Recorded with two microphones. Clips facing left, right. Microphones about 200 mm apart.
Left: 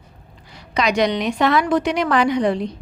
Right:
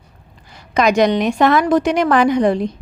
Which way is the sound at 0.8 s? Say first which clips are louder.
Right 5 dB; 50° right (ahead or behind).